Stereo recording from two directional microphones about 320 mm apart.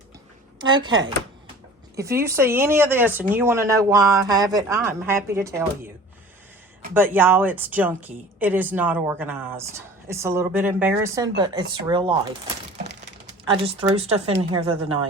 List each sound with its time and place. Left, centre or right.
0.6 s a woman's voice: centre
2.0 s a woman's voice: centre
6.9 s a woman's voice: centre
13.4 s a woman's voice: centre